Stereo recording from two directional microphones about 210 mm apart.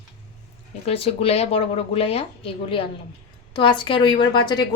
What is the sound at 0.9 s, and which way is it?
Speech, 30° left (ahead or behind).